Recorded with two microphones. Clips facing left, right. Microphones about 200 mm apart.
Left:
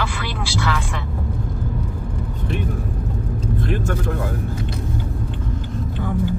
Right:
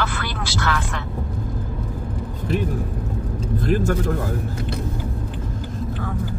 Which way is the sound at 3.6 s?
35° right (ahead or behind).